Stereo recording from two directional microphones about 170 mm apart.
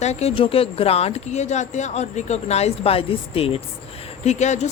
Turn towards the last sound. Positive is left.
turn(degrees=45)  # may be behind; listen again after turning